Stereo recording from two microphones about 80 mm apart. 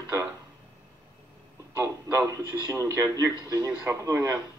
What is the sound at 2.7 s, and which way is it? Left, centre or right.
Speech, right.